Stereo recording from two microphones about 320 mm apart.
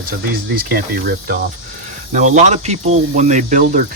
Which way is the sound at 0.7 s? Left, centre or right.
Right.